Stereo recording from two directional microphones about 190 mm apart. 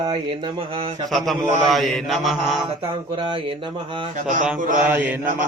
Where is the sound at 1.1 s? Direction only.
Centre (ahead or behind).